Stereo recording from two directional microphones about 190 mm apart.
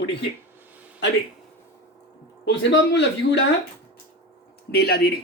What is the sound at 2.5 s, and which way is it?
Speech, 65° left (ahead or behind).